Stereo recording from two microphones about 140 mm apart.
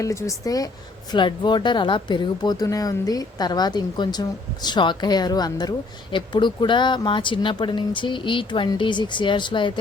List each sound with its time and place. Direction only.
0.0 s speech: 20° left (ahead or behind)